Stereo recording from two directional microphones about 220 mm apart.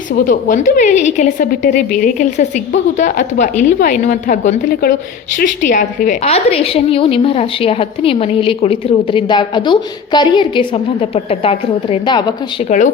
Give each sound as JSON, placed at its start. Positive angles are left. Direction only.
{"t": 0.3, "sound": "a woman's voice", "side_deg": 35}